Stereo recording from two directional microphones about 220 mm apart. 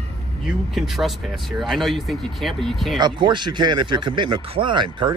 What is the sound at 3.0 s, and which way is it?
Speech, 20° right (ahead or behind).